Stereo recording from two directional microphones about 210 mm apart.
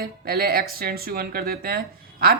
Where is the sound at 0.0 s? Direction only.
45° right (ahead or behind).